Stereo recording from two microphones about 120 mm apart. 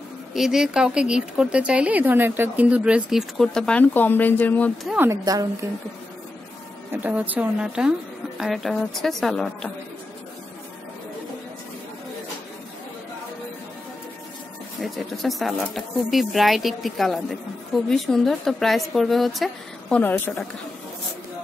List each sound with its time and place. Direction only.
0.3 s speech: 5° right (ahead or behind); by 4.7 s 15° left (ahead or behind)
5.1 s a woman's voice: 30° right (ahead or behind)
6.9 s speech: 10° right (ahead or behind); by 9.7 s 5° left (ahead or behind)
14.8 s speech: centre (ahead or behind)
20.0 s a woman's voice: 15° left (ahead or behind)